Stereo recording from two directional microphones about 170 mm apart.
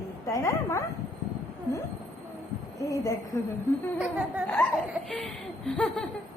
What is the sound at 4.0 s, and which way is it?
Speech, 10° right (ahead or behind).